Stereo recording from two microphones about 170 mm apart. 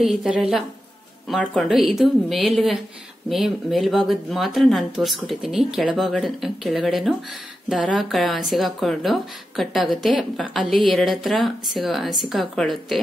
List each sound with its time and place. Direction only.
0.0 s speech: centre (ahead or behind)